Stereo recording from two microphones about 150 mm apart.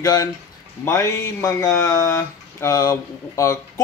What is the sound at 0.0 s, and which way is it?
Speech, 25° left (ahead or behind).